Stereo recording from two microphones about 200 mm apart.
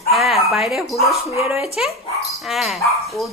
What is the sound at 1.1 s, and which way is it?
A woman's voice, 5° right (ahead or behind).